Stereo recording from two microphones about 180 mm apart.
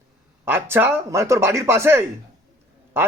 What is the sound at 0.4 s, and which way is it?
Speech, 10° right (ahead or behind).